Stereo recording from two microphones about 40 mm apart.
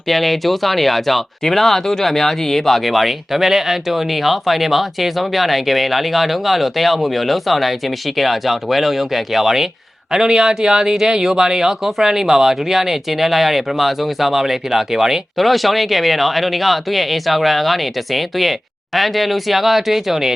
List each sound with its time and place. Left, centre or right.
0.1 s speech: centre
15.4 s speech: centre